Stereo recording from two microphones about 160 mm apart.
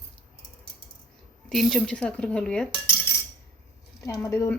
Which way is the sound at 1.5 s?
Centre (ahead or behind).